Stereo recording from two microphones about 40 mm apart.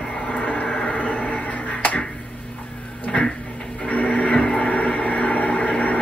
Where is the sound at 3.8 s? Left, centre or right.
Left.